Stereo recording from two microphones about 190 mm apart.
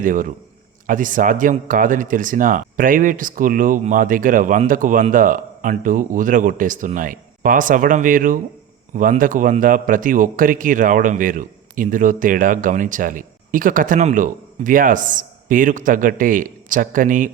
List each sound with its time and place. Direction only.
0.0 s a man's voice: 45° right (ahead or behind)